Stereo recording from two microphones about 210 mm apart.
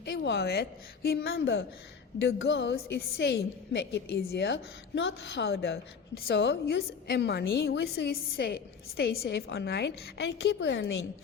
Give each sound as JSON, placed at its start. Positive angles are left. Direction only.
{"t": 0.0, "sound": "a woman's voice", "side_deg": 55}
{"t": 2.2, "sound": "a woman's voice", "side_deg": 60}